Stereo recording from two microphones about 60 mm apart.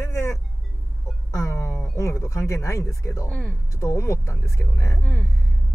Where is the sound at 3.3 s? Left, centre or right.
Centre.